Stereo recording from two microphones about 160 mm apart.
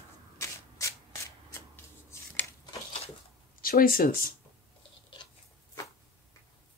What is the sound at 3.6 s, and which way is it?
Speech, 65° left (ahead or behind).